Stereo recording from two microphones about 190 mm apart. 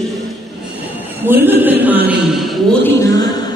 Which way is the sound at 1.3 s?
10° right (ahead or behind).